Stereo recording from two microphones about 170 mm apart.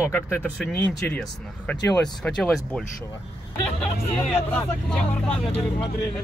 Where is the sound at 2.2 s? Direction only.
5° left (ahead or behind).